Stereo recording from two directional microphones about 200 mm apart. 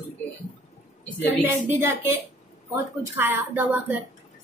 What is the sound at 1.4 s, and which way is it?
Speech, 10° right (ahead or behind).